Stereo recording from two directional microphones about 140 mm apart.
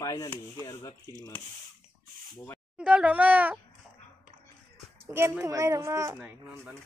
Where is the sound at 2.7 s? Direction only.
10° right (ahead or behind).